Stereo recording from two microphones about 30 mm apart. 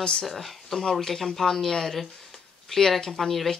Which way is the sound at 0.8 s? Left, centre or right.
Centre.